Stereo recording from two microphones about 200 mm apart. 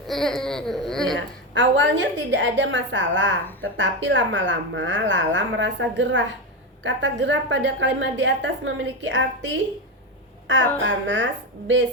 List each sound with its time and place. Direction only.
0.1 s speech: centre (ahead or behind)
1.5 s a woman's voice: 65° right (ahead or behind)